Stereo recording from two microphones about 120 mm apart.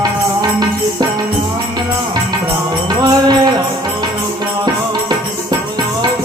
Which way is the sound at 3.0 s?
35° right (ahead or behind).